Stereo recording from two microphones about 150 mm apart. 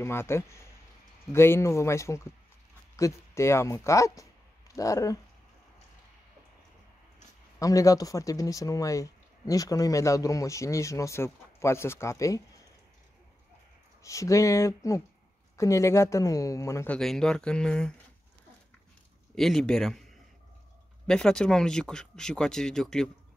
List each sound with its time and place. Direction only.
0.0 s speech: 15° left (ahead or behind)
7.5 s speech: 20° left (ahead or behind)
14.0 s speech: 20° left (ahead or behind)
16.9 s speech: 5° left (ahead or behind)
19.3 s speech: centre (ahead or behind)
21.1 s speech: 5° left (ahead or behind)